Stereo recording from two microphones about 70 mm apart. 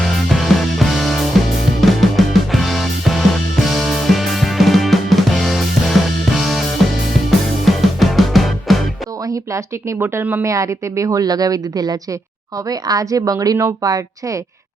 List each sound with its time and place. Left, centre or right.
0.0 s music: centre
9.2 s a woman's voice: right